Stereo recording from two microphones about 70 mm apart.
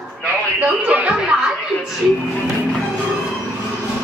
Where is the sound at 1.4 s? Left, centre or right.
Centre.